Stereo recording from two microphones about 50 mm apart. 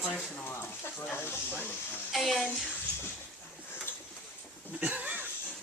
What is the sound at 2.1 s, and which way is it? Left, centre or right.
Speech, centre.